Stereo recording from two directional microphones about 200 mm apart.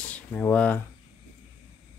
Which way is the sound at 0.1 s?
10° left (ahead or behind).